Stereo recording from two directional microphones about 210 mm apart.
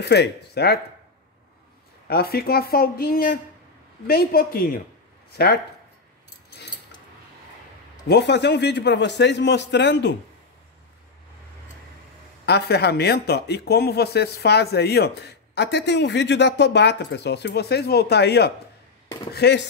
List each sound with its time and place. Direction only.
0.0 s speech: 50° left (ahead or behind)
2.0 s speech: 45° left (ahead or behind)
8.1 s a man's voice: 55° left (ahead or behind)
12.4 s a man's voice: 50° left (ahead or behind)